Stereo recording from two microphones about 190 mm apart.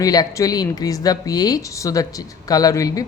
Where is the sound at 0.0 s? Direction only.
20° left (ahead or behind).